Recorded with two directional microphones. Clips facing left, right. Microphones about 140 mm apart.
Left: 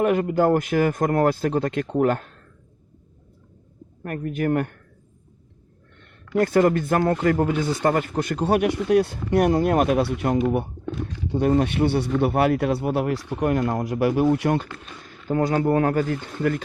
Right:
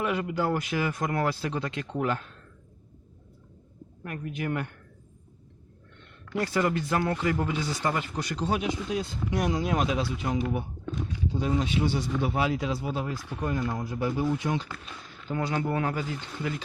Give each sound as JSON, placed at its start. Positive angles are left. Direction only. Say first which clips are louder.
{"t": 0.0, "sound": "speech", "louder": "left 9 dB", "side_deg": 45}
{"t": 4.0, "sound": "speech", "louder": "left 8 dB", "side_deg": 50}
{"t": 6.3, "sound": "speech", "louder": "left 8 dB", "side_deg": 55}
{"t": 15.0, "sound": "speech", "louder": "left 9 dB", "side_deg": 45}